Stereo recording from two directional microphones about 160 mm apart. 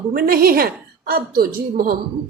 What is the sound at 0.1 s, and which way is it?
Speech, 70° right (ahead or behind).